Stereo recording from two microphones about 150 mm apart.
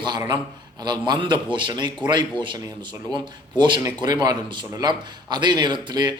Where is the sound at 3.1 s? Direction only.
30° right (ahead or behind).